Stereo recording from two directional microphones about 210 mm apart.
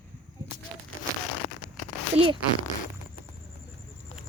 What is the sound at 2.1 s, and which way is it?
Speech, 25° right (ahead or behind).